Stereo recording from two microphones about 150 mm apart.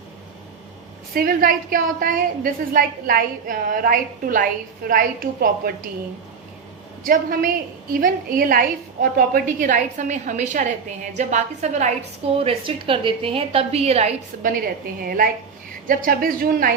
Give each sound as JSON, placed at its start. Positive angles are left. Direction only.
{"t": 1.1, "sound": "a woman's voice", "side_deg": -75}
{"t": 7.0, "sound": "a woman's voice", "side_deg": -65}
{"t": 12.4, "sound": "a woman's voice", "side_deg": -35}
{"t": 14.3, "sound": "a woman's voice", "side_deg": -65}